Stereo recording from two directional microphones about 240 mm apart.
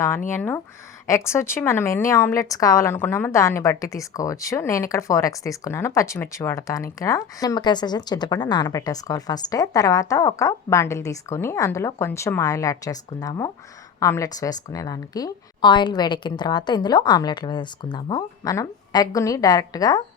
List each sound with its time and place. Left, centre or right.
0.3 s speech: centre